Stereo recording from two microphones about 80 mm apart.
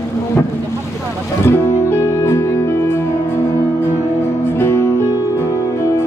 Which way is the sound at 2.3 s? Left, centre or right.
Left.